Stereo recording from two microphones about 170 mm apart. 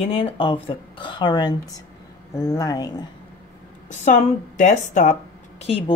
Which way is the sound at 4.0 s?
45° left (ahead or behind).